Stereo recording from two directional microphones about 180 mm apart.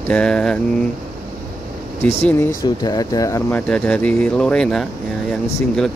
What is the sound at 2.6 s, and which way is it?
Speech, 20° left (ahead or behind).